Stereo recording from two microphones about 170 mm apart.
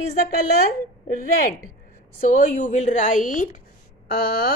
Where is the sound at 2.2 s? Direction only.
50° left (ahead or behind).